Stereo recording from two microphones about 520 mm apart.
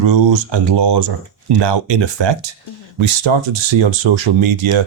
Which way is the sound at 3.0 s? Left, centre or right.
Right.